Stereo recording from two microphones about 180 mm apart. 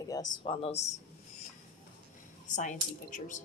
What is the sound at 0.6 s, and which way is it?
Speech, 35° left (ahead or behind).